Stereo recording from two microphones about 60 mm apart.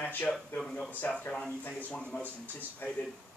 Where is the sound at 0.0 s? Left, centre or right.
Left.